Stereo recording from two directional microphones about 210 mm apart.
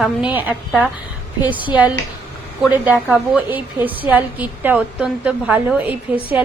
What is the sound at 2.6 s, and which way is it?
A woman's voice, 5° right (ahead or behind).